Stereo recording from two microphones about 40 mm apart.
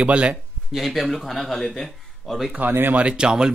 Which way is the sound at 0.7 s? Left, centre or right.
Centre.